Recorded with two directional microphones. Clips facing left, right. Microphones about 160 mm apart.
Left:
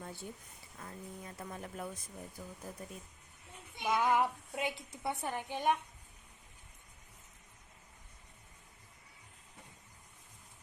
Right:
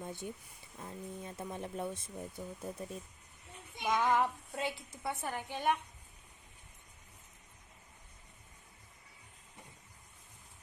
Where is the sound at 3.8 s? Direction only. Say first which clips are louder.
Even; 10° left (ahead or behind).